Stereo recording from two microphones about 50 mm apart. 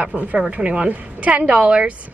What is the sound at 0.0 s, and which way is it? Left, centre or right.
A woman's voice, right.